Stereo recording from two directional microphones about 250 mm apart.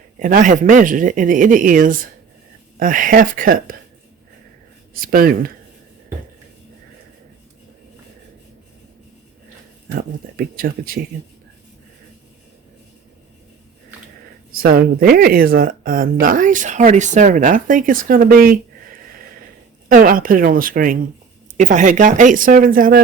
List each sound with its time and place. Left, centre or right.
0.2 s speech: right
4.9 s speech: right
9.9 s speech: right
14.6 s speech: right
19.9 s speech: right